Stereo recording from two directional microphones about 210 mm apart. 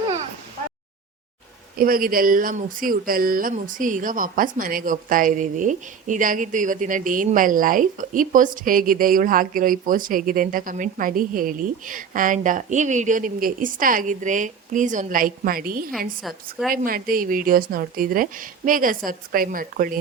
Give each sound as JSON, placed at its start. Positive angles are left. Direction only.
{"t": 1.8, "sound": "speech", "side_deg": -45}
{"t": 16.2, "sound": "a woman's voice", "side_deg": 0}
{"t": 16.7, "sound": "speech", "side_deg": -45}